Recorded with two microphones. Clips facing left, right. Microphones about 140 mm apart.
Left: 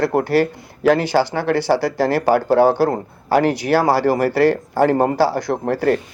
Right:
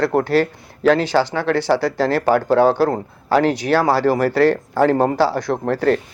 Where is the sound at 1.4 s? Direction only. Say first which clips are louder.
Even; 5° left (ahead or behind).